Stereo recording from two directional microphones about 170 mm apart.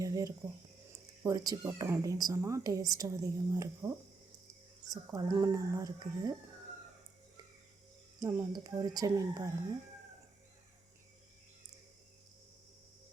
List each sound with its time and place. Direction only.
0.0 s a sound: 20° right (ahead or behind)
1.2 s speech: 20° right (ahead or behind)
8.2 s speech: 20° right (ahead or behind)